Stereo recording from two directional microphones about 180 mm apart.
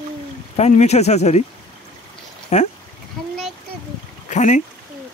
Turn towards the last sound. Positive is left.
turn(degrees=40)  # may be behind; listen again after turning